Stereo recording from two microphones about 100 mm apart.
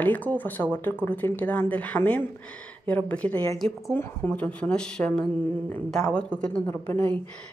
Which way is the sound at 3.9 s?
20° left (ahead or behind).